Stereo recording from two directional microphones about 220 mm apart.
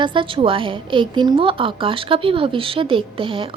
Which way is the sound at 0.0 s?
20° right (ahead or behind).